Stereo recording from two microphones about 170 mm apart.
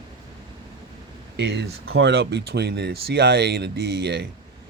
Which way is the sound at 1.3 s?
90° right.